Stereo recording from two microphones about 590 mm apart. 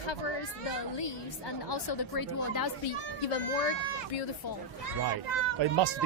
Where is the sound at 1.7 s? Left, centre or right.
Left.